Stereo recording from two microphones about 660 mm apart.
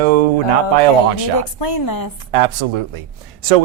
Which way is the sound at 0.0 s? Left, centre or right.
Right.